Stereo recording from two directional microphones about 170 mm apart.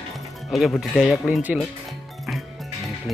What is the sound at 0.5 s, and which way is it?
Speech, centre (ahead or behind).